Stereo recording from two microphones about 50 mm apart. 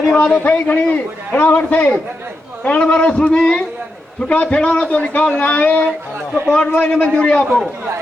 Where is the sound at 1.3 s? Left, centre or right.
Left.